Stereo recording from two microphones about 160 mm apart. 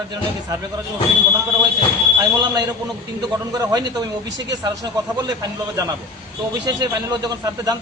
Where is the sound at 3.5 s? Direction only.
25° right (ahead or behind).